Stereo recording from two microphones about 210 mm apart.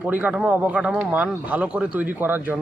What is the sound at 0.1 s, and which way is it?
Speech, 5° right (ahead or behind).